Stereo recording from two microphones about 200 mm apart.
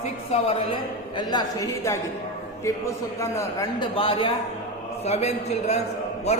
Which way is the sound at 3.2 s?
15° left (ahead or behind).